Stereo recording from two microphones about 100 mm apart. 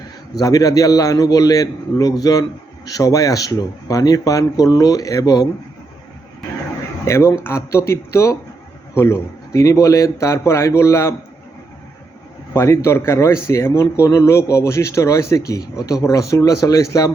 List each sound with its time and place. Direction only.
0.3 s a man's voice: 35° left (ahead or behind)
7.0 s a man's voice: 30° left (ahead or behind)
12.5 s a man's voice: 25° left (ahead or behind)